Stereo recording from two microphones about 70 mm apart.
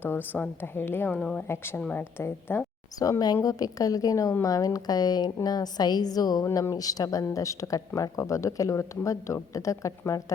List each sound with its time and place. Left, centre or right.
0.0 s a woman's voice: left
3.0 s a woman's voice: left
6.4 s speech: left